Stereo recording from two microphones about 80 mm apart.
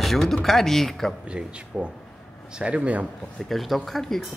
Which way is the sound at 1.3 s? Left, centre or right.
Centre.